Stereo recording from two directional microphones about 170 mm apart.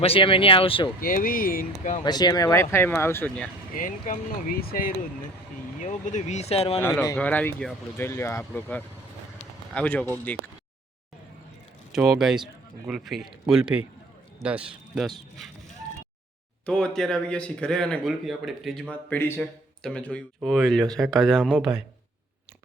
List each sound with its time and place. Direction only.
0.0 s speech: 35° left (ahead or behind)
1.0 s speech: 55° left (ahead or behind)
2.0 s speech: 25° left (ahead or behind); by 3.5 s 10° left (ahead or behind)
3.8 s speech: 50° left (ahead or behind)
5.8 s speech: 45° left (ahead or behind)
7.2 s speech: 10° left (ahead or behind)
11.9 s speech: centre (ahead or behind)
16.6 s speech: 5° left (ahead or behind)